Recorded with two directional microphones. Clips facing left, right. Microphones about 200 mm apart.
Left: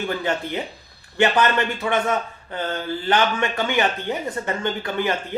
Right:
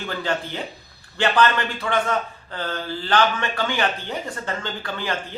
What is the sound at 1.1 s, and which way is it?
Speech, 20° left (ahead or behind).